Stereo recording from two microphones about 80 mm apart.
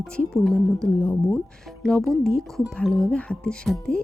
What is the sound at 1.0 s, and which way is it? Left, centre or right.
Speech, left.